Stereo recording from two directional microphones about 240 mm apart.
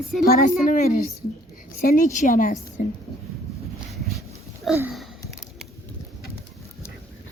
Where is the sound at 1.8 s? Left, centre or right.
Left.